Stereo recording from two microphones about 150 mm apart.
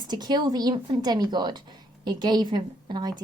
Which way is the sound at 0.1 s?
25° right (ahead or behind).